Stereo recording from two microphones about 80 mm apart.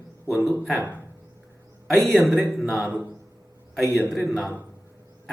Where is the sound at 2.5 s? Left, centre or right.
Centre.